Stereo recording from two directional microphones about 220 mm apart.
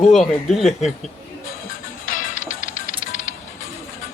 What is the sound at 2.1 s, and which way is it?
Music, 35° left (ahead or behind).